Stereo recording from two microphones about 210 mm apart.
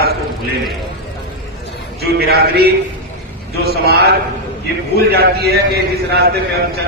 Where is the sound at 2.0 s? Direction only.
50° right (ahead or behind).